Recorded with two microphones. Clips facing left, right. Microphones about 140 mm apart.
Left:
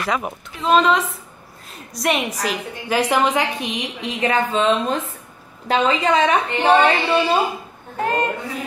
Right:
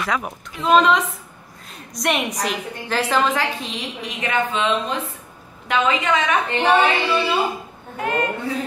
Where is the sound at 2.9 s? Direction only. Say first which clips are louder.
Left 2 dB; 15° left (ahead or behind).